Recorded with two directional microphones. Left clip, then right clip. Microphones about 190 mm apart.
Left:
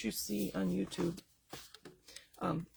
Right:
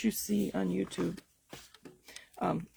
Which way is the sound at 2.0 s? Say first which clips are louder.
Right 5 dB; 45° right (ahead or behind).